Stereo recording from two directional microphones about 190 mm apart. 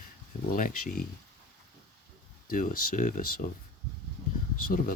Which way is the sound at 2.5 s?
45° left (ahead or behind).